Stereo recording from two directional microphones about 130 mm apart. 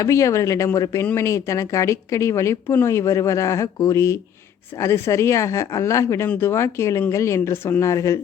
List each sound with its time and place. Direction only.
0.0 s speech: 25° left (ahead or behind)